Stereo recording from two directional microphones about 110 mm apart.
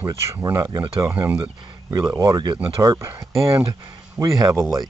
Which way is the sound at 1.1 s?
15° right (ahead or behind).